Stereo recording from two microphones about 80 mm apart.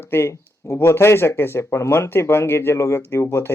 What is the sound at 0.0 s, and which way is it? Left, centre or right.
Speech, left.